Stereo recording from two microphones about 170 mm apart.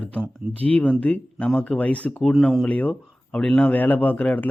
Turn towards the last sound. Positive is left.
turn(degrees=10)  # may be behind; listen again after turning